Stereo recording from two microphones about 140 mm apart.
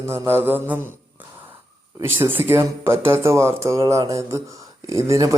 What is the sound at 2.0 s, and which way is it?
Speech, 15° right (ahead or behind).